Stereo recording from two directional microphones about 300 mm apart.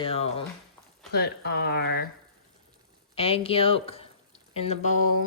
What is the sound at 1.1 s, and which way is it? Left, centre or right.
Speech, left.